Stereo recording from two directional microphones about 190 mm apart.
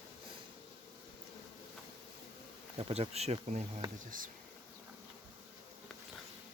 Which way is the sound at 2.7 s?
30° right (ahead or behind).